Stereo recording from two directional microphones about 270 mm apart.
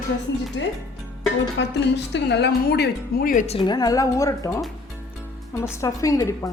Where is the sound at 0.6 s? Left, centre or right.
Left; by 4.7 s centre.